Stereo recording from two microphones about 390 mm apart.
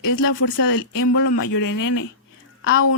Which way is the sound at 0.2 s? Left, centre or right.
Left.